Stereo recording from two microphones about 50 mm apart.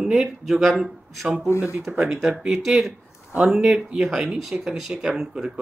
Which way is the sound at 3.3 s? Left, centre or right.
Right.